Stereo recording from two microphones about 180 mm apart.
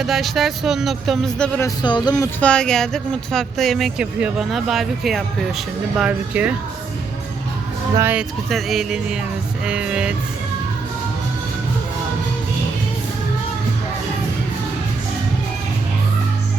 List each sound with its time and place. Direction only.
0.0 s speech: centre (ahead or behind)
1.5 s speech: 20° left (ahead or behind)
2.4 s speech: 5° left (ahead or behind)
7.9 s speech: 15° right (ahead or behind)
8.4 s speech: centre (ahead or behind)